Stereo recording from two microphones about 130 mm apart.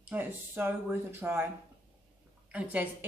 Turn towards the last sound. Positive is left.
turn(degrees=-15)  # may be behind; listen again after turning